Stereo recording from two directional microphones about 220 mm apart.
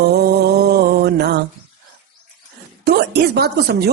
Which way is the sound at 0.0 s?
45° right (ahead or behind).